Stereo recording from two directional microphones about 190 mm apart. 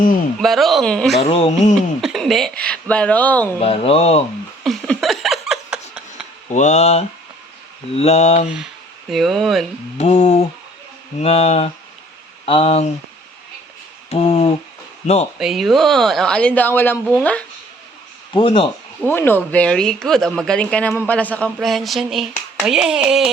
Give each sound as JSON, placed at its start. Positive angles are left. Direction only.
{"t": 0.3, "sound": "speech", "side_deg": 0}
{"t": 1.2, "sound": "speech", "side_deg": 30}
{"t": 1.7, "sound": "speech", "side_deg": 0}
{"t": 3.6, "sound": "speech", "side_deg": 30}
{"t": 4.6, "sound": "laughter", "side_deg": 0}
{"t": 6.5, "sound": "speech", "side_deg": 40}
{"t": 9.0, "sound": "speech", "side_deg": 0}
{"t": 10.0, "sound": "speech", "side_deg": 35}
{"t": 14.1, "sound": "speech", "side_deg": 35}
{"t": 15.4, "sound": "speech", "side_deg": 0}
{"t": 18.3, "sound": "a man's voice", "side_deg": 25}
{"t": 19.0, "sound": "speech", "side_deg": 10}